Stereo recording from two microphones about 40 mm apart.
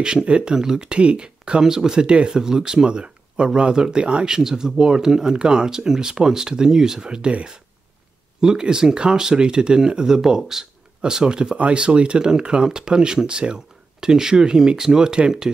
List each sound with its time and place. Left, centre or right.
0.0 s speech: right
0.8 s speech: right
8.4 s speech: centre
11.5 s speech: right